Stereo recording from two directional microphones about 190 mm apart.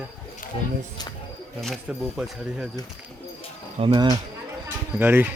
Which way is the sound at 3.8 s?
25° right (ahead or behind).